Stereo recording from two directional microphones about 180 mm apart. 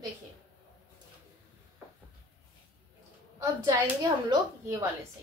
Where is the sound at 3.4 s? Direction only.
20° right (ahead or behind).